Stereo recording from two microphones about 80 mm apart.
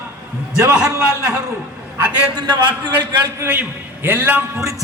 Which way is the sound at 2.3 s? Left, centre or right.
Right.